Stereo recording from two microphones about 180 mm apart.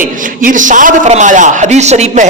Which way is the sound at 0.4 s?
45° right (ahead or behind).